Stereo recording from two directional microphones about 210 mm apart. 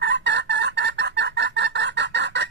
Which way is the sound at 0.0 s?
55° right (ahead or behind).